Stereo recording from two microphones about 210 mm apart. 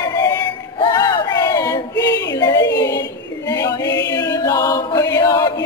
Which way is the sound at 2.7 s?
15° left (ahead or behind).